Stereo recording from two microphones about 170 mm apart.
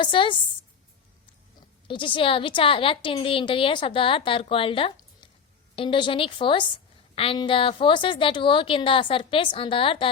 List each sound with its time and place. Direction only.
0.0 s a woman's voice: 30° left (ahead or behind)
1.9 s a woman's voice: 30° left (ahead or behind)